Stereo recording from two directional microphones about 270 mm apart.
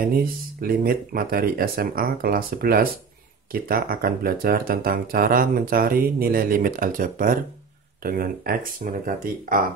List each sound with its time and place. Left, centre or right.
0.0 s speech: right